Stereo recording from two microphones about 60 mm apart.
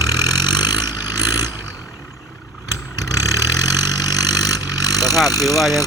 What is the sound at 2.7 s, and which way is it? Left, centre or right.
Vehicle, left.